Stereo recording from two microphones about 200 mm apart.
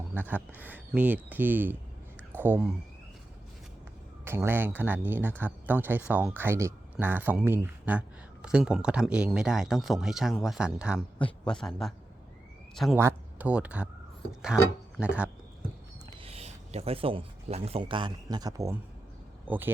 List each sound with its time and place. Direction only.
0.1 s speech: 10° right (ahead or behind)
4.3 s speech: 10° right (ahead or behind)
16.0 s speech: 30° right (ahead or behind); by 19.7 s 10° right (ahead or behind)